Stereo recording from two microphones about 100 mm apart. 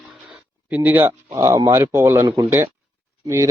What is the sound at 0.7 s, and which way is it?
Speech, 20° right (ahead or behind).